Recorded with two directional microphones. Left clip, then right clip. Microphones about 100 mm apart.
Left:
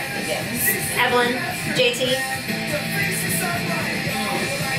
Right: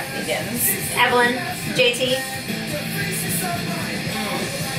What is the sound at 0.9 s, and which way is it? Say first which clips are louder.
Speech: right 3 dB; 15° left (ahead or behind).